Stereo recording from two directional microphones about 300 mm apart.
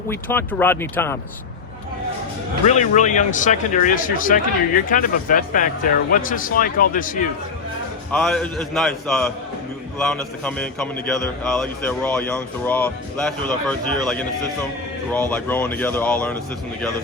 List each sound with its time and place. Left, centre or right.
0.1 s speech: centre
2.6 s speech: left
8.1 s a man's voice: centre